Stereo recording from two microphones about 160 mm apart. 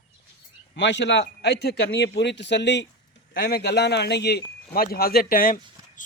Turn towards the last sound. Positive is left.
turn(degrees=60)  # may be behind; listen again after turning